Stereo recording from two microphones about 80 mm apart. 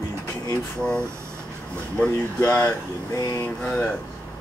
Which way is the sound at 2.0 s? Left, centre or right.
Left.